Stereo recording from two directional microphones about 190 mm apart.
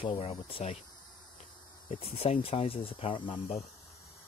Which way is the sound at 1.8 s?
35° left (ahead or behind).